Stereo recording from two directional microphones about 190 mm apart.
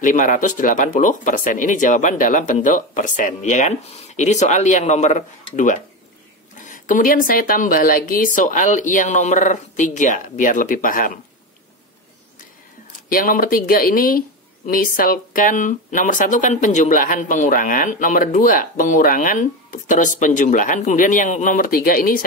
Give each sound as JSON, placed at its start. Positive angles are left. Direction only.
{"t": 0.0, "sound": "speech", "side_deg": 45}
{"t": 13.1, "sound": "speech", "side_deg": 50}